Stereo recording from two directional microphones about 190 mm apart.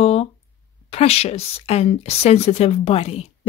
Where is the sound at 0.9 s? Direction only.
30° left (ahead or behind).